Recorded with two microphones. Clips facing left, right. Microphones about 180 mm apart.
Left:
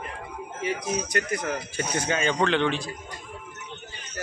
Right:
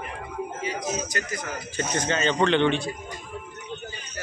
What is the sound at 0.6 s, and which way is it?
Speech, 60° left (ahead or behind).